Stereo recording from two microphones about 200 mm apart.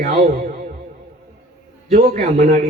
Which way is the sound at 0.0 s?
45° right (ahead or behind).